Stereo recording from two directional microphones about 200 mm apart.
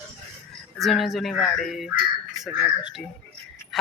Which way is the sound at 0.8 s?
Centre (ahead or behind).